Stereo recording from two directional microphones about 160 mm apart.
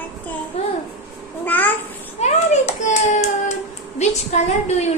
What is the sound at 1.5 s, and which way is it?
Babbling, 10° left (ahead or behind).